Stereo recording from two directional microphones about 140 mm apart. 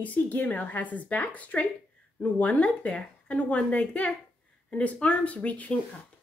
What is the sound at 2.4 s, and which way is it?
A woman's voice, 10° left (ahead or behind).